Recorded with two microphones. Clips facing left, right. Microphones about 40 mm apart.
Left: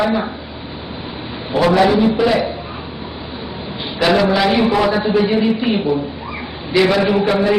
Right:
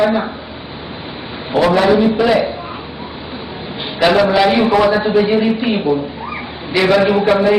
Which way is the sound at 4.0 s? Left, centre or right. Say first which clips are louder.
Right 3 dB; centre.